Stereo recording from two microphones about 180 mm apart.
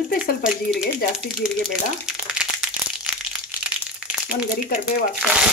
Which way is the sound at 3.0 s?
5° right (ahead or behind).